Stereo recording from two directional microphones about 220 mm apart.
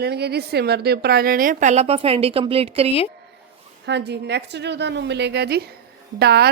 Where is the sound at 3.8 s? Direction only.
50° right (ahead or behind).